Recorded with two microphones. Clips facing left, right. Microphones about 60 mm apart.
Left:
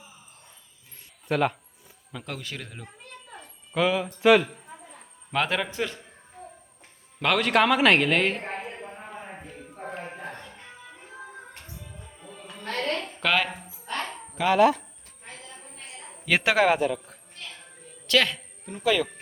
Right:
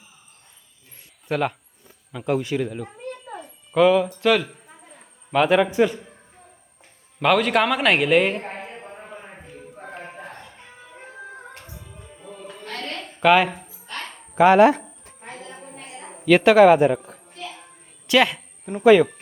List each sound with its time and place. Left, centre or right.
1.3 s a man's voice: centre
2.1 s speech: centre
3.3 s a sound: centre
7.2 s a woman's voice: centre
13.1 s speech: centre
14.3 s speech: right
16.2 s a man's voice: centre
16.8 s speech: right
17.1 s music: centre
18.1 s a sound: centre
18.7 s speech: right